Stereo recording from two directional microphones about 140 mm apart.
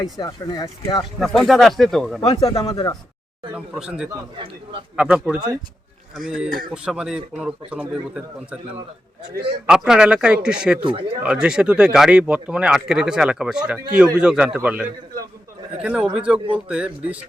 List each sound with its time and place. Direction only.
0.0 s speech: 30° left (ahead or behind)
1.2 s speech: centre (ahead or behind)
2.4 s speech: 25° left (ahead or behind)
2.6 s speech: 35° left (ahead or behind)
3.5 s speech: 5° right (ahead or behind)
4.1 s a man's voice: 35° right (ahead or behind)
4.9 s speech: 5° right (ahead or behind)
9.6 s speech: 5° right (ahead or behind)
10.8 s a man's voice: 40° right (ahead or behind)
11.2 s speech: 5° right (ahead or behind)